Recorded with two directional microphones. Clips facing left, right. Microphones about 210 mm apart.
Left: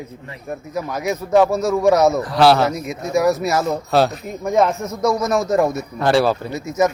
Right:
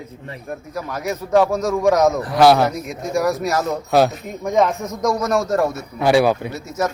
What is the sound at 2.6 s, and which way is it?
Speech, 5° left (ahead or behind).